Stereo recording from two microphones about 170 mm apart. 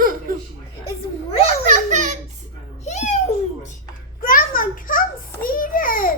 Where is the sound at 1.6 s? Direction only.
45° right (ahead or behind).